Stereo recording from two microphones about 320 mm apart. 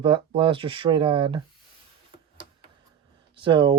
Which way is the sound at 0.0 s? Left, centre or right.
Centre.